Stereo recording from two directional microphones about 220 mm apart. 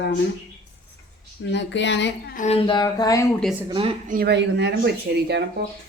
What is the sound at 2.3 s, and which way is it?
Speech, 30° left (ahead or behind).